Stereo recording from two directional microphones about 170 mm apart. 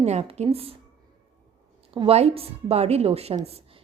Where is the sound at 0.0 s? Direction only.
40° right (ahead or behind).